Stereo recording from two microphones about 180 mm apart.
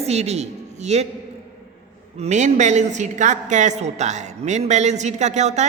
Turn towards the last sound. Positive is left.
turn(degrees=-40)  # may be behind; listen again after turning